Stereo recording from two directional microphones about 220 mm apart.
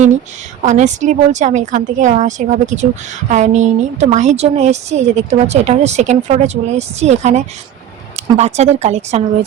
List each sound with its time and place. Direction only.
0.6 s a woman's voice: 35° right (ahead or behind)